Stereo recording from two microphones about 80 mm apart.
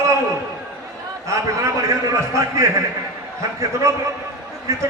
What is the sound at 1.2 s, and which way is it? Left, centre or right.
A man's voice, right.